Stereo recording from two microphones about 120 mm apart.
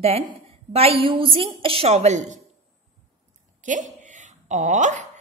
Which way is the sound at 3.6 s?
90° right.